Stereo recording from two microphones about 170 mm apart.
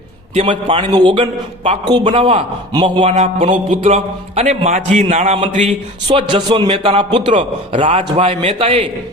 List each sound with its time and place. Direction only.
0.3 s a man's voice: 30° right (ahead or behind)
7.9 s a man's voice: 40° right (ahead or behind)